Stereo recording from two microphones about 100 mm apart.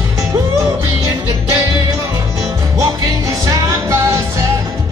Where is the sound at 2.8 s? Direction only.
35° right (ahead or behind).